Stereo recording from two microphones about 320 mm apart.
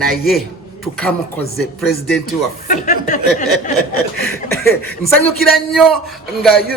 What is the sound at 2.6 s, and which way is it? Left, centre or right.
Speech, left.